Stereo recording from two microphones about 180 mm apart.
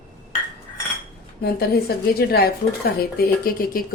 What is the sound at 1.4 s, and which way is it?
A woman's voice, 60° left (ahead or behind).